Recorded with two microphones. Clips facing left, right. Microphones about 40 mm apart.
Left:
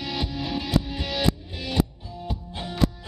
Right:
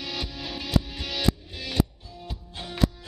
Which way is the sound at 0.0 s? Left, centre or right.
Centre.